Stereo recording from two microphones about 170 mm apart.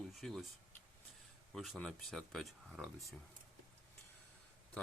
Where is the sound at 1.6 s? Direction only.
Centre (ahead or behind).